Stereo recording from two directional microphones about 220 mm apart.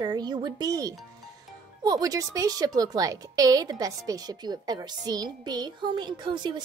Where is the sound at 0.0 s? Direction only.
20° right (ahead or behind).